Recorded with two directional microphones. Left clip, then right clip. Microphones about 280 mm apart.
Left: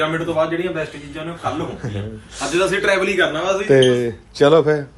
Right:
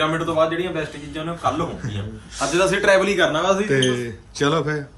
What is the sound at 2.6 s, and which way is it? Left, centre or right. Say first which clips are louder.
A man's voice: right 1 dB; right.